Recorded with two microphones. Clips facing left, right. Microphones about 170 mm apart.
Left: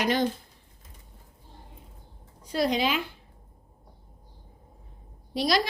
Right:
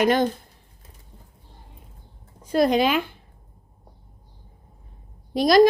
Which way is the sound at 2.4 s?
50° right (ahead or behind).